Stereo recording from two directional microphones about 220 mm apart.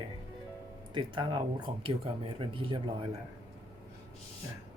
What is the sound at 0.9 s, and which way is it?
Speech, 20° right (ahead or behind).